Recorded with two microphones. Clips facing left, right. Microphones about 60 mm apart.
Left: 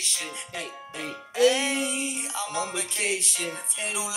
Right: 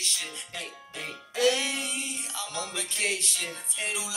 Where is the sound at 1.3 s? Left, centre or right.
Left.